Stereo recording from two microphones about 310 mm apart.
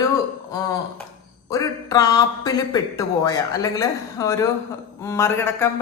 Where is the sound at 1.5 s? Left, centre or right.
Centre.